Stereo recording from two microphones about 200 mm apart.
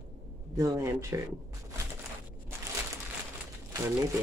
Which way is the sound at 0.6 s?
15° right (ahead or behind).